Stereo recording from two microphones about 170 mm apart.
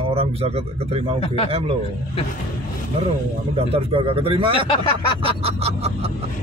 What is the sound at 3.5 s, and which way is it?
A man's voice, 35° right (ahead or behind).